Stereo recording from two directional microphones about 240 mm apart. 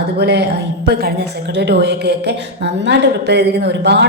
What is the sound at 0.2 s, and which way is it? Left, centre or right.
Speech, right.